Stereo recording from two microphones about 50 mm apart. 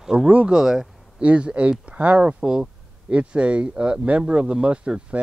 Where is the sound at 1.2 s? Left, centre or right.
Right.